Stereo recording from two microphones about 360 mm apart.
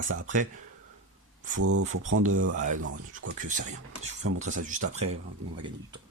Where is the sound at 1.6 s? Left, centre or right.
Right.